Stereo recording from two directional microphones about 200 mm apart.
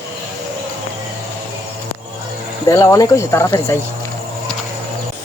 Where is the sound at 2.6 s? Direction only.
15° left (ahead or behind).